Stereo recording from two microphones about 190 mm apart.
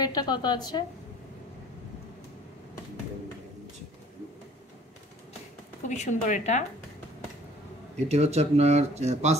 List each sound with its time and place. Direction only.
0.0 s a woman's voice: 20° left (ahead or behind)
5.9 s speech: 40° left (ahead or behind)
8.1 s speech: 35° right (ahead or behind)